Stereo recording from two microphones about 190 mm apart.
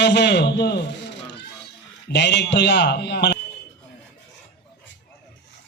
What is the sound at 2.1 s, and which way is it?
A man's voice, 65° left (ahead or behind).